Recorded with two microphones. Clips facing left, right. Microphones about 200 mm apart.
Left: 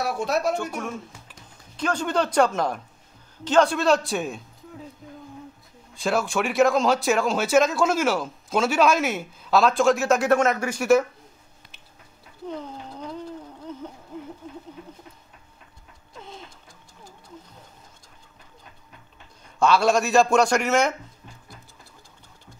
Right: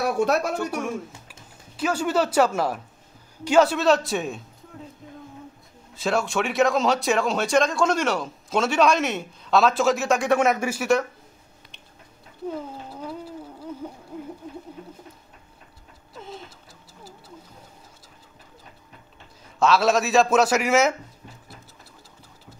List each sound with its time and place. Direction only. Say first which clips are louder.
0.0 s speech: right 4 dB; 65° right (ahead or behind)
0.6 s speech: right 3 dB; 10° right (ahead or behind)
5.0 s music: even; centre (ahead or behind)
5.9 s speech: even; centre (ahead or behind)
10.4 s speech: right 1 dB; 10° right (ahead or behind)
12.4 s a sound: right 2 dB; 5° right (ahead or behind)
16.2 s clock: right 3 dB; centre (ahead or behind)
19.6 s speech: even; centre (ahead or behind)